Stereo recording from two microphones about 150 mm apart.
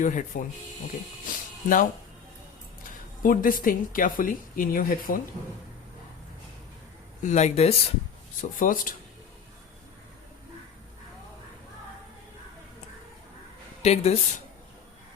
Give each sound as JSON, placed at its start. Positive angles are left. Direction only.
{"t": 0.0, "sound": "speech", "side_deg": 55}
{"t": 1.3, "sound": "music", "side_deg": 65}
{"t": 3.2, "sound": "speech", "side_deg": 65}
{"t": 7.2, "sound": "speech", "side_deg": 50}
{"t": 8.4, "sound": "speech", "side_deg": 65}
{"t": 13.8, "sound": "speech", "side_deg": 45}